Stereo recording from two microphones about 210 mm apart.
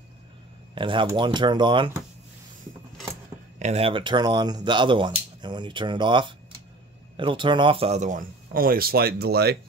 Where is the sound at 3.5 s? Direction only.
30° right (ahead or behind).